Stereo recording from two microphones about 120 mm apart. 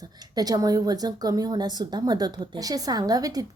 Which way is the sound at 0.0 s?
30° right (ahead or behind).